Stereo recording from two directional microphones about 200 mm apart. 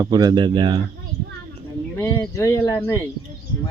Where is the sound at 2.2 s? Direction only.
15° left (ahead or behind).